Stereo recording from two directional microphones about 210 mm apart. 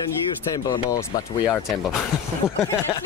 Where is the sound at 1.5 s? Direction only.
Centre (ahead or behind).